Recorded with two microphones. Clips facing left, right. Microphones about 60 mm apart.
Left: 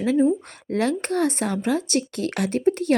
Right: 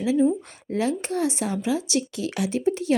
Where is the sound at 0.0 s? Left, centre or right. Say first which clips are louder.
Left 1 dB; left.